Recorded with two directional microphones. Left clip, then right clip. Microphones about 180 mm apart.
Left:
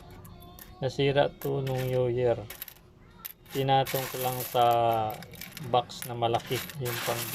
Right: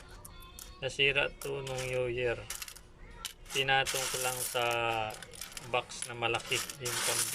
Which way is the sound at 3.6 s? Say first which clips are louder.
Left 3 dB; 20° left (ahead or behind).